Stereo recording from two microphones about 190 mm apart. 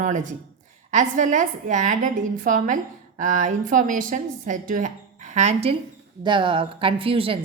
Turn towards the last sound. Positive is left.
turn(degrees=-30)  # may be behind; listen again after turning